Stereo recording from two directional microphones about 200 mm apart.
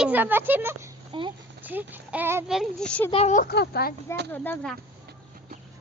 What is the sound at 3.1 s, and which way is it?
Speech, 35° left (ahead or behind).